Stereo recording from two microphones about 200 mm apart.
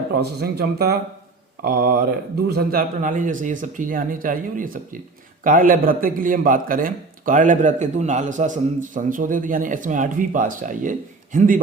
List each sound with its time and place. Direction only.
0.1 s a man's voice: 50° right (ahead or behind)